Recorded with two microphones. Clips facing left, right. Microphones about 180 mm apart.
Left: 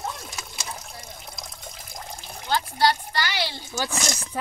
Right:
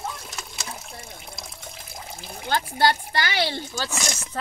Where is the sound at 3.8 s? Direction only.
15° left (ahead or behind).